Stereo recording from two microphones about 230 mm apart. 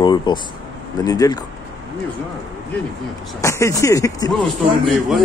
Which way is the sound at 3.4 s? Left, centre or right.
Centre.